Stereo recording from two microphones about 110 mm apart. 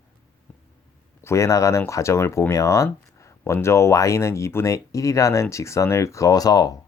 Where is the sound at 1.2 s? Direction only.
25° left (ahead or behind).